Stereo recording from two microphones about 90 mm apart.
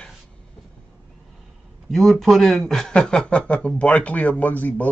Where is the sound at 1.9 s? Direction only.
Centre (ahead or behind); by 4.9 s 20° left (ahead or behind).